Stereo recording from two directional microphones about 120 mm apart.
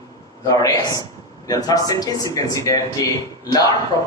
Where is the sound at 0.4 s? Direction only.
30° left (ahead or behind).